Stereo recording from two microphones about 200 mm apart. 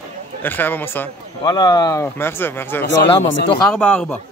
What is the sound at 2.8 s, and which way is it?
Speech, 60° left (ahead or behind).